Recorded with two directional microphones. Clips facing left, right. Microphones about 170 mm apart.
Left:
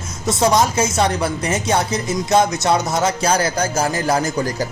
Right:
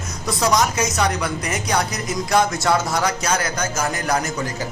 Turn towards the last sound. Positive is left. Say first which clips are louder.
# left 4 dB
turn(degrees=30)  # may be behind; listen again after turning